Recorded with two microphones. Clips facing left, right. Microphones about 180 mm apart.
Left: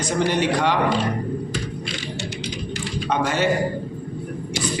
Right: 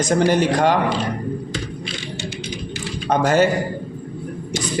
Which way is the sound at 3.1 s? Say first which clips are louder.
Right 6 dB; 45° right (ahead or behind).